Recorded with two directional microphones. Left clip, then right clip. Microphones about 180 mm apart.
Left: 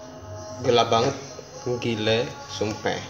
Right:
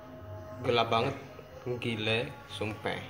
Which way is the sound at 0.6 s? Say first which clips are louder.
Left 8 dB; 25° left (ahead or behind).